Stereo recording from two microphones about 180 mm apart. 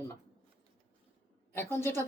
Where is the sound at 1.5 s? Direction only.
15° left (ahead or behind).